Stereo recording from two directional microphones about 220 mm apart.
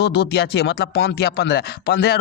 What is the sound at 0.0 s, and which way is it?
Speech, 50° left (ahead or behind).